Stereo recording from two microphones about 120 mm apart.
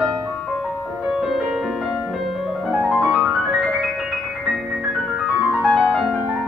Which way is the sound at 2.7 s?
Centre (ahead or behind).